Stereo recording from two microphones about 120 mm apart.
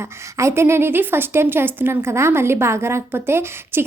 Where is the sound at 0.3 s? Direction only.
20° right (ahead or behind).